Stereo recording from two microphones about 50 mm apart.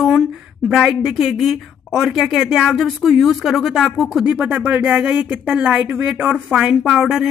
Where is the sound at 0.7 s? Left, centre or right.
Centre.